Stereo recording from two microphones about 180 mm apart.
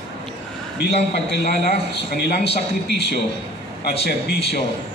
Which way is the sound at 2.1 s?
65° left (ahead or behind).